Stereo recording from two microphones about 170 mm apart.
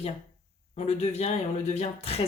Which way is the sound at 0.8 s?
40° left (ahead or behind).